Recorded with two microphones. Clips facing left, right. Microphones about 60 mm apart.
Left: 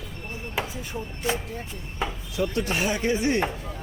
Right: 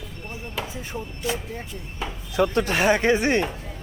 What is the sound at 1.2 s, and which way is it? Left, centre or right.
Speech, left.